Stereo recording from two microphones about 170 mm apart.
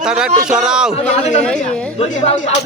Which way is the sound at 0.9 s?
40° left (ahead or behind).